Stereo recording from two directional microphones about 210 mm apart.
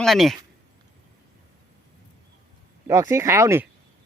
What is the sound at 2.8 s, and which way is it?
Speech, 15° right (ahead or behind).